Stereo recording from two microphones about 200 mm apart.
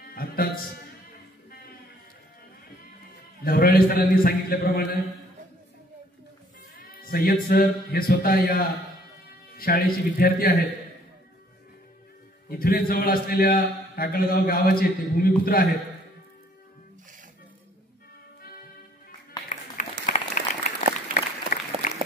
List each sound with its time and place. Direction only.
0.1 s music: 45° left (ahead or behind)
3.4 s a man's voice: 45° left (ahead or behind)
7.1 s a man's voice: 50° left (ahead or behind)
12.4 s a man's voice: 50° left (ahead or behind)
19.5 s applause: 35° left (ahead or behind)